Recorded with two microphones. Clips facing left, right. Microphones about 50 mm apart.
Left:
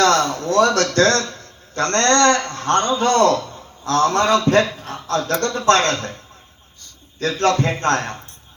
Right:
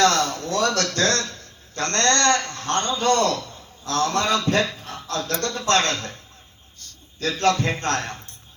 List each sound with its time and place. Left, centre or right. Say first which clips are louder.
0.0 s a man's voice: left 3 dB; left
7.2 s a man's voice: left 3 dB; left